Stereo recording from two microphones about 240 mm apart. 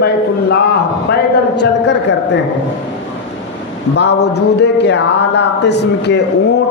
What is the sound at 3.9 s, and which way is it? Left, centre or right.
Speech, left.